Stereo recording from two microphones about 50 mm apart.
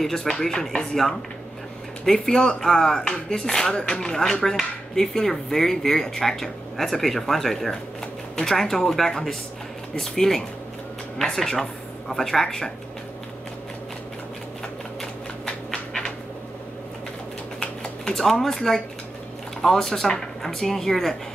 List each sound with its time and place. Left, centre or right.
0.0 s speech: centre
15.0 s a sound: centre
18.0 s speech: centre